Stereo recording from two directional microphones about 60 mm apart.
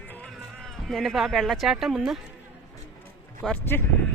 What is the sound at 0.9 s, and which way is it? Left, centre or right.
A man's voice, centre.